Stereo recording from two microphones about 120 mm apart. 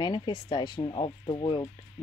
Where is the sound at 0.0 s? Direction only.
40° left (ahead or behind).